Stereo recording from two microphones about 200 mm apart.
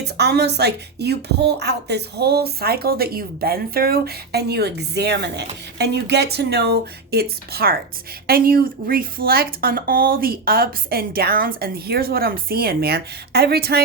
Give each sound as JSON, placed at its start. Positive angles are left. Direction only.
{"t": 0.0, "sound": "speech", "side_deg": -55}